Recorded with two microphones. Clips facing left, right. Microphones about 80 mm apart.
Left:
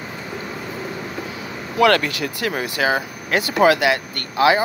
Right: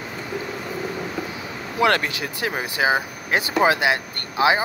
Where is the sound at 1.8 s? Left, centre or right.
Right.